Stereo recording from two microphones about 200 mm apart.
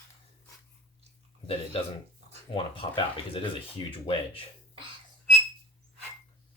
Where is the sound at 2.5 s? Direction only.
25° left (ahead or behind).